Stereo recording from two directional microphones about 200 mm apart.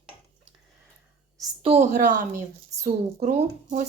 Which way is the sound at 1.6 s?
35° right (ahead or behind).